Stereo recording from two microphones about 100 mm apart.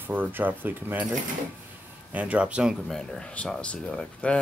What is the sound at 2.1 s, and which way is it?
Speech, 15° right (ahead or behind).